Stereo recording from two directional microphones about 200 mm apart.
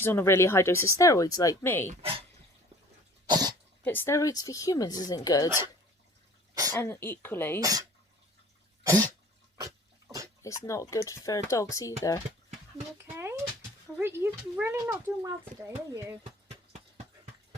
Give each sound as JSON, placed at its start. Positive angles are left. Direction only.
{"t": 0.0, "sound": "speech", "side_deg": 10}
{"t": 1.9, "sound": "speech", "side_deg": -30}
{"t": 3.2, "sound": "cough", "side_deg": -20}
{"t": 3.8, "sound": "speech", "side_deg": 10}
{"t": 6.5, "sound": "cough", "side_deg": -20}
{"t": 6.7, "sound": "speech", "side_deg": 10}
{"t": 7.6, "sound": "speech", "side_deg": -20}
{"t": 8.8, "sound": "cough", "side_deg": -15}
{"t": 9.6, "sound": "dog", "side_deg": -15}
{"t": 10.4, "sound": "speech", "side_deg": 15}
{"t": 13.0, "sound": "a sound", "side_deg": -10}
{"t": 13.9, "sound": "speech", "side_deg": -10}